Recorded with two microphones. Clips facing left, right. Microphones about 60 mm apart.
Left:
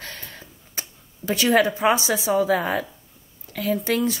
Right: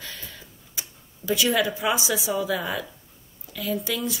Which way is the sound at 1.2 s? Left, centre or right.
Left.